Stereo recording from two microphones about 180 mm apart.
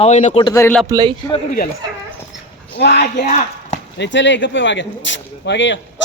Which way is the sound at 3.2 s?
40° left (ahead or behind).